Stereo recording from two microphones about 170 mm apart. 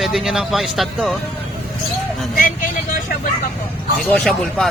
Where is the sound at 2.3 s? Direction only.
55° left (ahead or behind).